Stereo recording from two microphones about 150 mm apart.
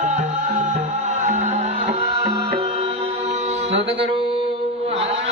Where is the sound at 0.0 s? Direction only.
50° right (ahead or behind).